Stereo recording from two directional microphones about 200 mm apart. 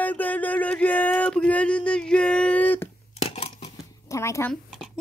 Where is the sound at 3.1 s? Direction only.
30° left (ahead or behind).